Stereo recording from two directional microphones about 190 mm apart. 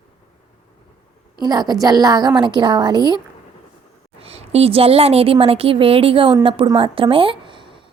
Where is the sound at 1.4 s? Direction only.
20° right (ahead or behind).